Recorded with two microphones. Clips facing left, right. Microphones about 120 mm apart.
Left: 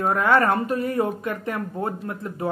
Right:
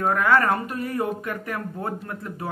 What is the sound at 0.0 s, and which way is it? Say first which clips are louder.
Speech: left 1 dB; 25° left (ahead or behind).